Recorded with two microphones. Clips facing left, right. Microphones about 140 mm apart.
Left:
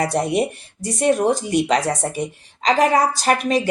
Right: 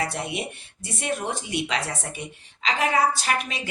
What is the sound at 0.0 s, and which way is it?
Speech, 40° left (ahead or behind).